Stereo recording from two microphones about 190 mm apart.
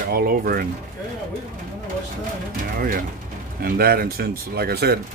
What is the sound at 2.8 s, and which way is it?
Speech, 50° right (ahead or behind).